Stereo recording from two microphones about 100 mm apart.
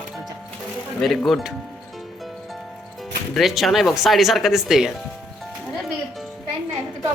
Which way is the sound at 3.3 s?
Centre (ahead or behind).